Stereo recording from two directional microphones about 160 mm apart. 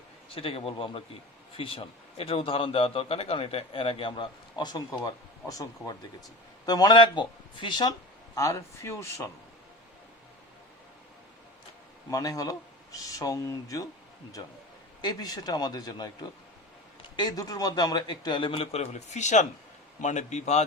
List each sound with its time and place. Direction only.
0.3 s a man's voice: 35° left (ahead or behind); by 9.3 s 15° left (ahead or behind)
12.1 s a man's voice: 20° left (ahead or behind)
15.0 s a man's voice: 25° left (ahead or behind)
17.2 s a man's voice: 25° left (ahead or behind); by 20.7 s 45° left (ahead or behind)